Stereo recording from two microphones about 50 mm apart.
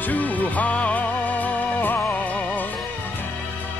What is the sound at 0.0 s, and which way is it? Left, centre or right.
Music, left.